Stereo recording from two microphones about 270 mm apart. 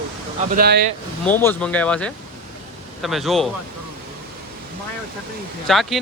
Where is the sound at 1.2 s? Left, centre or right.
Centre.